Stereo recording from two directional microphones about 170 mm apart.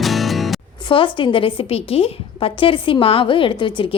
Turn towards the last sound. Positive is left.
turn(degrees=30)  # may be behind; listen again after turning